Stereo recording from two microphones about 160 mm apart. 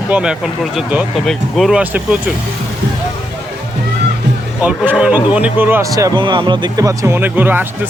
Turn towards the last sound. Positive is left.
turn(degrees=-10)  # may be behind; listen again after turning